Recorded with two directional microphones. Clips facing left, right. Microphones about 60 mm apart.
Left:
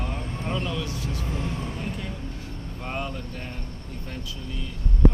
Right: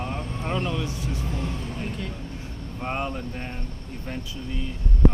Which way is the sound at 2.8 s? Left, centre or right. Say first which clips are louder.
Right 3 dB; right.